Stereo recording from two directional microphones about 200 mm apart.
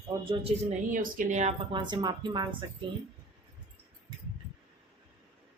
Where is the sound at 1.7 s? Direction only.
20° right (ahead or behind).